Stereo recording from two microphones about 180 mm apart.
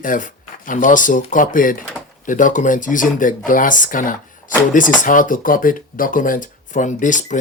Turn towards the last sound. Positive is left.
turn(degrees=45)  # may be behind; listen again after turning